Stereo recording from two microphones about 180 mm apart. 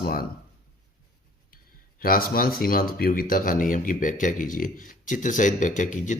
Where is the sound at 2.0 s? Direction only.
55° left (ahead or behind).